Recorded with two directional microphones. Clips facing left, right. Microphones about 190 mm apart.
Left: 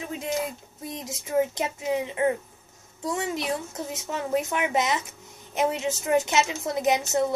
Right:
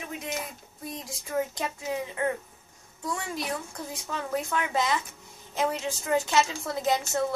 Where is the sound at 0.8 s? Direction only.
20° left (ahead or behind).